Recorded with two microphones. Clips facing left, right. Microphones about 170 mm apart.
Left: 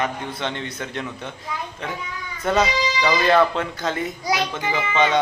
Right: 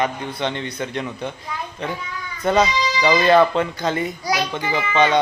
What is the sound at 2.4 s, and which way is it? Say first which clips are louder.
A man's voice: right 2 dB; 5° left (ahead or behind).